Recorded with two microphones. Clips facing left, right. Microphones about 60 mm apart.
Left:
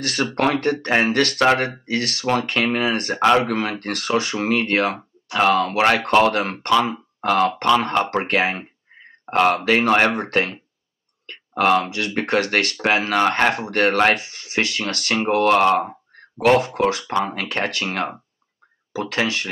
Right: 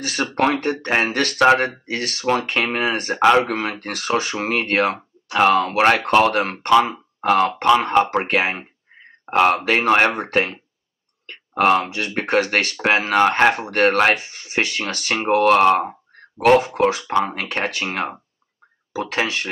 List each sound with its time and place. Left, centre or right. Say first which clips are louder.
0.3 s speech: right 1 dB; centre
14.1 s speech: right 1 dB; right